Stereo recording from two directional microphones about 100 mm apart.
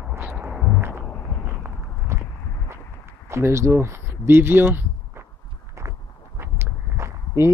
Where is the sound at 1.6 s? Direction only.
25° right (ahead or behind).